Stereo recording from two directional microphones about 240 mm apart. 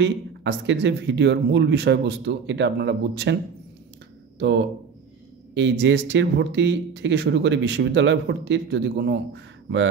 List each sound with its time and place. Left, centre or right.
0.0 s speech: right
4.4 s speech: right